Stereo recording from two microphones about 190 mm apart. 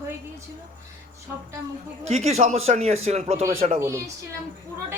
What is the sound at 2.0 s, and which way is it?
A man's voice, 35° right (ahead or behind).